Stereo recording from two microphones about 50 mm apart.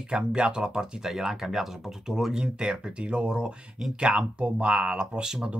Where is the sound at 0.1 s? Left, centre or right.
Centre.